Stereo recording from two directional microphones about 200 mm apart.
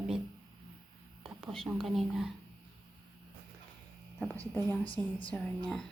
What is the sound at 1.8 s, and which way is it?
Speech, centre (ahead or behind).